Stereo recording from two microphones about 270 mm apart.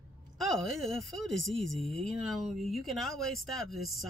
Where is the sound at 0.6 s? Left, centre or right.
Centre.